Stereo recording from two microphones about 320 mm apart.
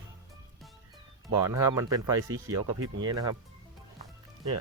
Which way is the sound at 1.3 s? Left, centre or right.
Centre.